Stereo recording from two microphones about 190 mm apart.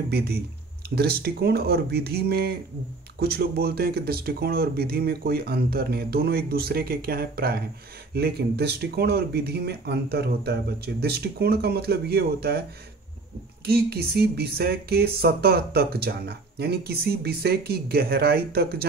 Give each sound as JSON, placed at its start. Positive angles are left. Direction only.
{"t": 0.1, "sound": "speech", "side_deg": -55}
{"t": 13.7, "sound": "speech", "side_deg": -55}